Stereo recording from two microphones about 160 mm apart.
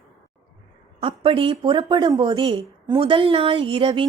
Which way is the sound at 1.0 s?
35° right (ahead or behind).